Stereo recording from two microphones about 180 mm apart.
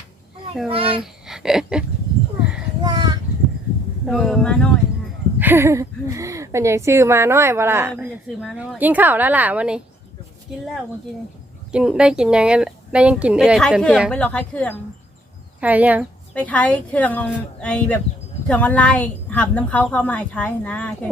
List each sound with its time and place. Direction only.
0.7 s a child's voice: 30° right (ahead or behind)
1.0 s speech: 5° right (ahead or behind)
2.8 s a sound: 20° right (ahead or behind)
4.0 s speech: centre (ahead or behind)
5.4 s a woman's voice: 10° right (ahead or behind)
11.7 s a woman's voice: 5° right (ahead or behind)
15.6 s a woman's voice: 10° right (ahead or behind)
16.3 s a woman's voice: 5° left (ahead or behind)